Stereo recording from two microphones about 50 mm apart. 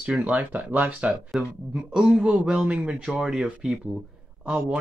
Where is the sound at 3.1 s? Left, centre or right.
Centre.